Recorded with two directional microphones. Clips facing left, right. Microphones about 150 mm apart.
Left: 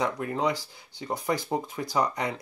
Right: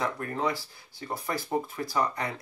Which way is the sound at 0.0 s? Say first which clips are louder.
Left 3 dB; 15° left (ahead or behind).